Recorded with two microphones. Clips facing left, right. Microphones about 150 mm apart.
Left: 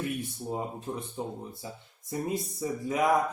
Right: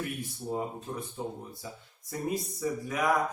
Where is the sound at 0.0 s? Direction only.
20° left (ahead or behind).